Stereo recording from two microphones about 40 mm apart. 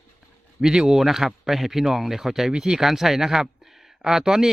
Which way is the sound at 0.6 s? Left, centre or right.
Centre.